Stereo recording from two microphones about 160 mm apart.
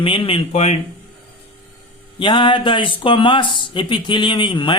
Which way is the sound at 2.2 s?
30° left (ahead or behind).